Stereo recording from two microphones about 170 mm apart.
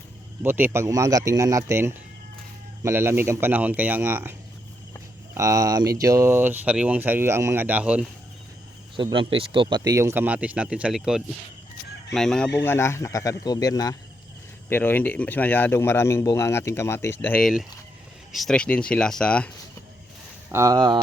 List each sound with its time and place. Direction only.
0.4 s speech: 10° right (ahead or behind)
9.0 s speech: 30° right (ahead or behind); by 12.5 s 5° left (ahead or behind)
12.6 s a man's voice: 15° left (ahead or behind)
20.5 s speech: 20° right (ahead or behind)